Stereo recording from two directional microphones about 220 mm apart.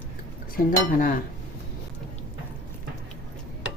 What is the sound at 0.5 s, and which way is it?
Speech, 40° left (ahead or behind).